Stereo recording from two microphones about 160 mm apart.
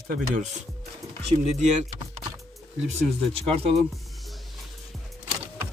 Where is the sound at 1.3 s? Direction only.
45° right (ahead or behind).